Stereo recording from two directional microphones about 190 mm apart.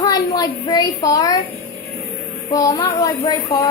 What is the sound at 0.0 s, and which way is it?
A child's voice, 20° left (ahead or behind).